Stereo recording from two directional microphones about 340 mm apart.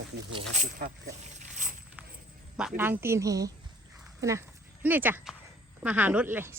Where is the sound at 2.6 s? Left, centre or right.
Centre.